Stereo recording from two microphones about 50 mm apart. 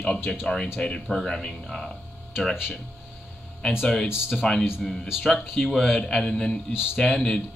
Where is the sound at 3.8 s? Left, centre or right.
Centre.